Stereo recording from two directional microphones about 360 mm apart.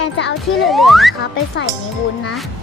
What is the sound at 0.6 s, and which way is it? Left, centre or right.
Speech, centre.